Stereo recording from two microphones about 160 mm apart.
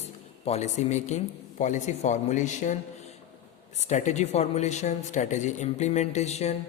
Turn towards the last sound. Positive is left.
turn(degrees=45)  # may be behind; listen again after turning